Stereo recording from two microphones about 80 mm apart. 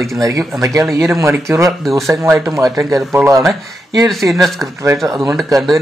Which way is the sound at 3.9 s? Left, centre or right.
Right.